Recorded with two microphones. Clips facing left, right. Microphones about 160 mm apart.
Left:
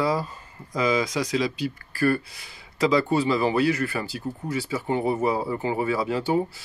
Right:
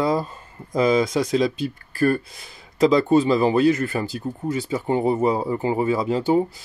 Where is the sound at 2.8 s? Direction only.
20° right (ahead or behind).